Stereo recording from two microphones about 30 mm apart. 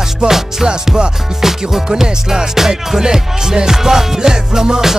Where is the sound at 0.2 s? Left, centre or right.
Right.